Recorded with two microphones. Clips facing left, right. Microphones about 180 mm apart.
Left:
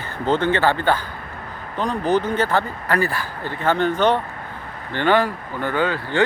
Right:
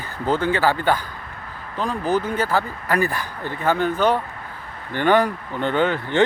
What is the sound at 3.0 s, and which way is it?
Speech, 15° right (ahead or behind).